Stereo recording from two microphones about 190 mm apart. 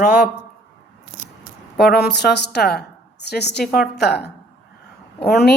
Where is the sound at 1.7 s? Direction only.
60° left (ahead or behind).